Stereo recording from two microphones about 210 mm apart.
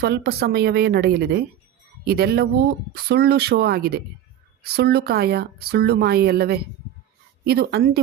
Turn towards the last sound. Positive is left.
turn(degrees=-50)  # may be behind; listen again after turning